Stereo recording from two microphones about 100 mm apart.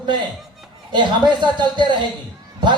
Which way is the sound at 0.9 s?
50° right (ahead or behind).